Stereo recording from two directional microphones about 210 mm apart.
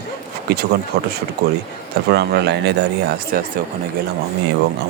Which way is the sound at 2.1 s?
50° right (ahead or behind).